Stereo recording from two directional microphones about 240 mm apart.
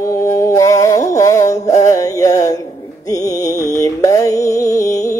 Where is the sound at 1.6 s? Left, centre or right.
Left.